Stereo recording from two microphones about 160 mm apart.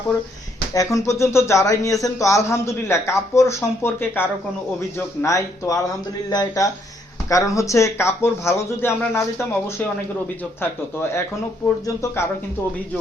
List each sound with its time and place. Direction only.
0.7 s speech: 20° left (ahead or behind)
11.9 s speech: 15° left (ahead or behind)